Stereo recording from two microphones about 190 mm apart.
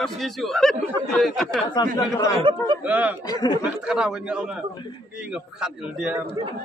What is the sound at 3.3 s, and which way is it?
Speech, 20° left (ahead or behind).